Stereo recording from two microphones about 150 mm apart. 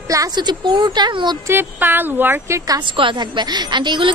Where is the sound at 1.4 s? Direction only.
15° right (ahead or behind).